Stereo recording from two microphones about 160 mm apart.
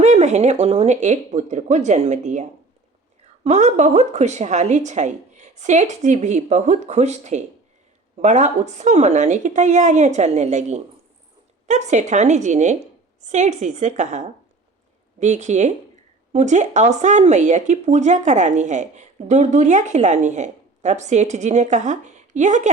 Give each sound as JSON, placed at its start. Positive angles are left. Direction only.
{"t": 0.0, "sound": "speech", "side_deg": -45}